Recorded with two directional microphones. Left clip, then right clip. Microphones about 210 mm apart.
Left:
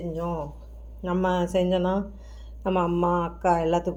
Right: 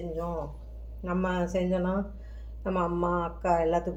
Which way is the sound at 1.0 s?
35° left (ahead or behind).